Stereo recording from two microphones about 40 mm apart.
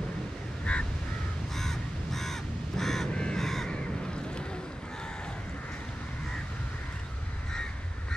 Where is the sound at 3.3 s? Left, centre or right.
Centre.